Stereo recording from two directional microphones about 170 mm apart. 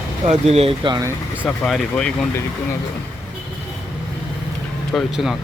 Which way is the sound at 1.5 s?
Centre (ahead or behind).